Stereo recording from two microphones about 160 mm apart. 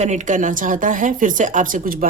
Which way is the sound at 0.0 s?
50° right (ahead or behind).